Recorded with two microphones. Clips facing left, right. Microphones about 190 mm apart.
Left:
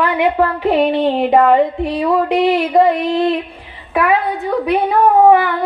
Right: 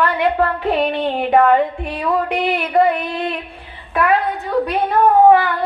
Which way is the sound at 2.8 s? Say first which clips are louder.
Left 1 dB; 30° left (ahead or behind).